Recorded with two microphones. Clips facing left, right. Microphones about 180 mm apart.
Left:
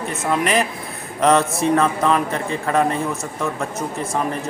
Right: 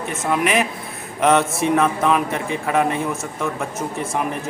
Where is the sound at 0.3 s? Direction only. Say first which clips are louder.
Even; 5° right (ahead or behind).